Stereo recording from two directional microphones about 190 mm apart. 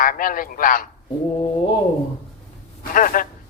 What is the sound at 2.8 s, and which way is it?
Speech, 45° left (ahead or behind).